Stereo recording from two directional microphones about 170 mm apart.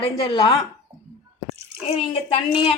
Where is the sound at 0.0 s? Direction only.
30° left (ahead or behind).